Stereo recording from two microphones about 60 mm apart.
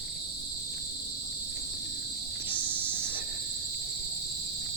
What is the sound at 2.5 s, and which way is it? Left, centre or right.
Cricket, right.